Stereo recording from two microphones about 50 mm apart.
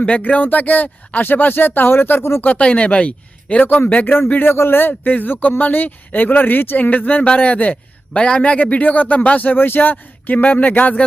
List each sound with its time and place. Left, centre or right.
0.2 s speech: left
2.4 s speech: left
4.4 s speech: left
9.6 s speech: left